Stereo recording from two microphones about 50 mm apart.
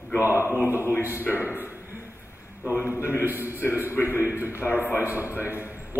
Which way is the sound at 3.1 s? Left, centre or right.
Right.